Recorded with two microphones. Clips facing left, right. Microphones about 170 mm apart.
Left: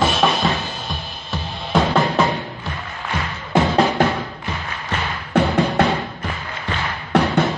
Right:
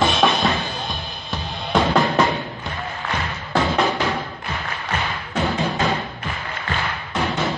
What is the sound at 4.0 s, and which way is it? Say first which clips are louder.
Music: left 5 dB; 50° left (ahead or behind).